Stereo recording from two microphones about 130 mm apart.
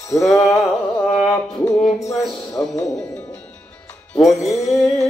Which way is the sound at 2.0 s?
25° left (ahead or behind).